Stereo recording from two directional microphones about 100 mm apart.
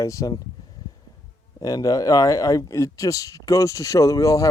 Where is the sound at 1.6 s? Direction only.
40° left (ahead or behind).